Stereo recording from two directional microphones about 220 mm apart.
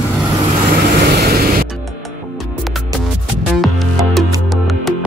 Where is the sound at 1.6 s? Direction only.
Centre (ahead or behind).